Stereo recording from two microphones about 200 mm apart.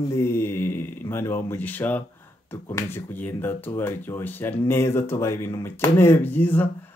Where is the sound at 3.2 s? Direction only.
10° left (ahead or behind).